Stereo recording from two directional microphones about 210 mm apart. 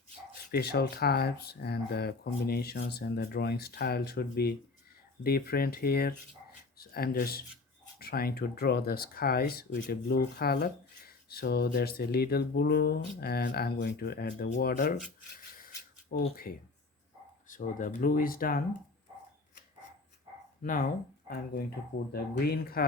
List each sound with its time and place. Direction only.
0.5 s speech: 50° left (ahead or behind)
15.5 s rub: 45° left (ahead or behind)
16.3 s speech: 45° left (ahead or behind)
20.6 s speech: 40° left (ahead or behind)
22.1 s speech: 45° left (ahead or behind)